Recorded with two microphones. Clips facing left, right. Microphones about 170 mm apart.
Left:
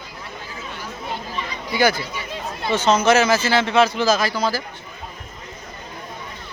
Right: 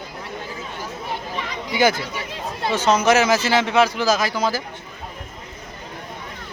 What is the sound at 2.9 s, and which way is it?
Speech, 15° right (ahead or behind).